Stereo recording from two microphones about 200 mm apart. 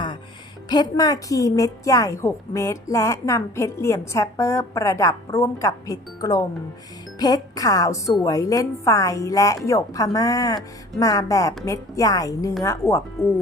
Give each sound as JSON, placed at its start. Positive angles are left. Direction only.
{"t": 0.7, "sound": "a woman's voice", "side_deg": 20}